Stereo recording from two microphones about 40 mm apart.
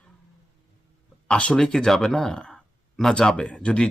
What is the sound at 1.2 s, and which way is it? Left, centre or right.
Speech, left.